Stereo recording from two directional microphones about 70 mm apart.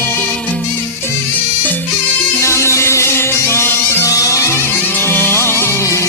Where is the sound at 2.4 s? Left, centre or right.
Left.